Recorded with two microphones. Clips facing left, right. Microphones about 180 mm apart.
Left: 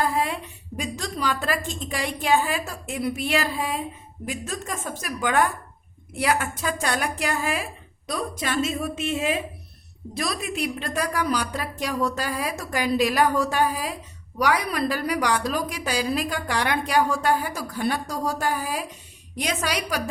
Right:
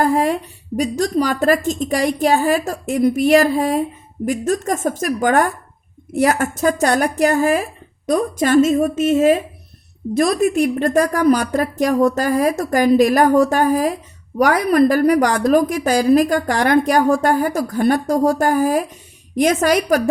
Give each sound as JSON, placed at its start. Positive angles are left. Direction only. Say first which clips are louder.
{"t": 0.0, "sound": "a woman's voice", "louder": "right 8 dB", "side_deg": -45}